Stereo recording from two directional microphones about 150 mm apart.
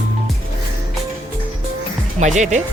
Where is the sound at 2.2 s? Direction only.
55° right (ahead or behind).